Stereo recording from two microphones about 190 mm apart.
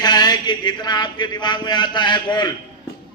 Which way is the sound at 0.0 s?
20° left (ahead or behind).